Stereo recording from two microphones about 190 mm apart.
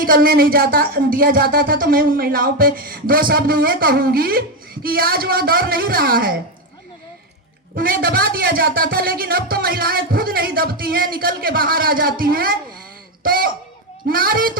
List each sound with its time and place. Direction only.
0.0 s speech: 50° right (ahead or behind)
7.8 s speech: 50° right (ahead or behind)